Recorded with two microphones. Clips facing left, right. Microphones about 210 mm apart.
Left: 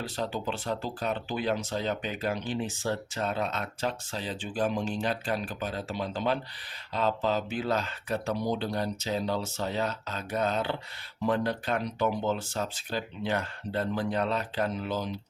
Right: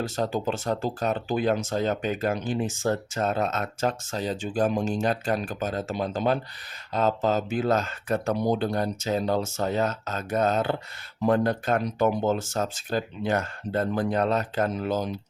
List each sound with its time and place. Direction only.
0.0 s speech: 45° right (ahead or behind)